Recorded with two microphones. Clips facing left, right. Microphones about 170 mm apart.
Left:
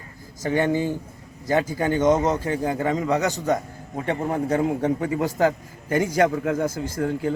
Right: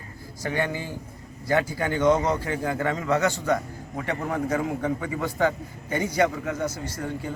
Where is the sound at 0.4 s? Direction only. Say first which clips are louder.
Left 6 dB; 20° left (ahead or behind); by 5.3 s 40° left (ahead or behind).